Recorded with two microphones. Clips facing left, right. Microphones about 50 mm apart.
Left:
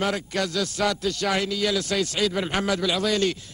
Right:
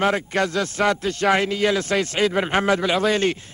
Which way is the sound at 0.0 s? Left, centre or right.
Right.